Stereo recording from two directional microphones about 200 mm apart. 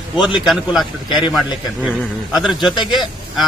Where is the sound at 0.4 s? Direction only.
Centre (ahead or behind).